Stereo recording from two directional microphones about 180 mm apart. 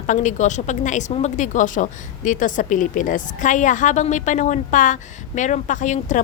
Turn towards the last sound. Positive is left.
turn(degrees=45)  # may be behind; listen again after turning